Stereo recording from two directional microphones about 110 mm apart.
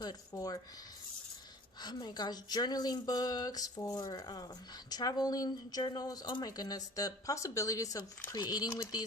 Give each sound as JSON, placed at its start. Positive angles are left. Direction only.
{"t": 0.0, "sound": "speech", "side_deg": 35}
{"t": 1.8, "sound": "speech", "side_deg": 40}